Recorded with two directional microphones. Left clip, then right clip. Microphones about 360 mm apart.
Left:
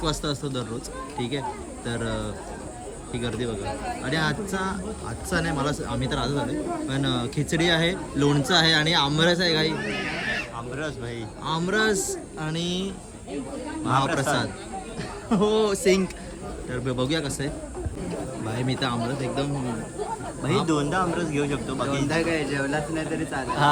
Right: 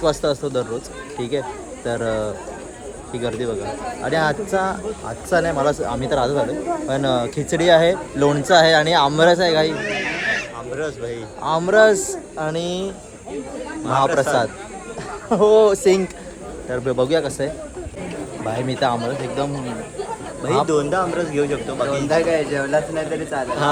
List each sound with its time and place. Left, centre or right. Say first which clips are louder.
0.0 s a man's voice: right 9 dB; centre
1.8 s a man's voice: right 9 dB; centre
9.8 s chatter: right 6 dB; left
10.8 s speech: right 8 dB; centre
11.4 s a man's voice: right 10 dB; centre
14.2 s a man's voice: right 8 dB; centre
20.7 s a man's voice: right 5 dB; centre